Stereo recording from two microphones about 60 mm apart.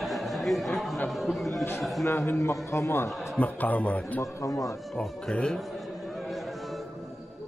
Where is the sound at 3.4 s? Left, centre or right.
Left.